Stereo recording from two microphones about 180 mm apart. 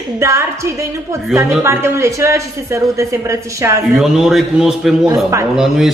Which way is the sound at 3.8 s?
Centre (ahead or behind).